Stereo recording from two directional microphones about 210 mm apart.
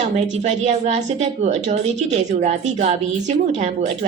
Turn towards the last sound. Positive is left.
turn(degrees=-35)  # may be behind; listen again after turning